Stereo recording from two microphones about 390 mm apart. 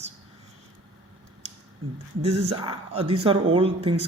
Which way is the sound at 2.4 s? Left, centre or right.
Centre.